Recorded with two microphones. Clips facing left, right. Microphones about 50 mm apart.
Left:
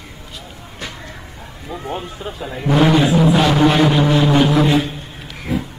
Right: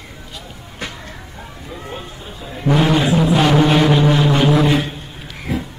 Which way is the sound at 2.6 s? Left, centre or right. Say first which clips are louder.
Left 1 dB; centre.